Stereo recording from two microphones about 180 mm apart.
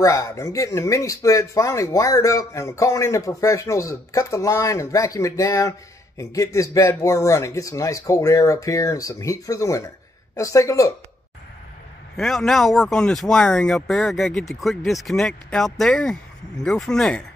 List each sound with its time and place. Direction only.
0.0 s speech: 15° left (ahead or behind)
12.2 s speech: centre (ahead or behind)